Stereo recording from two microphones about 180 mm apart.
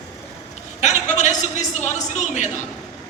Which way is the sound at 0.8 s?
40° left (ahead or behind).